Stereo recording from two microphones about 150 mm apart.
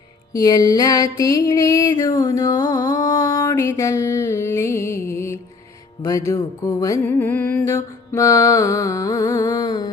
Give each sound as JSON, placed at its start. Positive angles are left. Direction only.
{"t": 0.3, "sound": "music", "side_deg": 25}
{"t": 6.0, "sound": "mantra", "side_deg": 20}